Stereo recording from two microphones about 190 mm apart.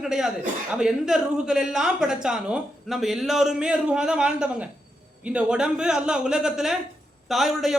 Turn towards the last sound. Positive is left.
turn(degrees=0)  # may be behind; listen again after turning